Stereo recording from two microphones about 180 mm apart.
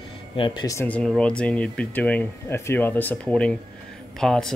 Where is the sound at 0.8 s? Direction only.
5° left (ahead or behind).